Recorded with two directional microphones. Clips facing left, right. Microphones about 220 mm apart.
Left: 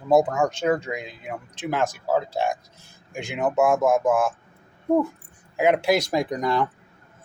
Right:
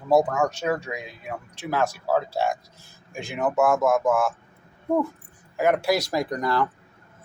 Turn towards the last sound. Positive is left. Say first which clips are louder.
# left 1 dB
turn(degrees=20)  # may be behind; listen again after turning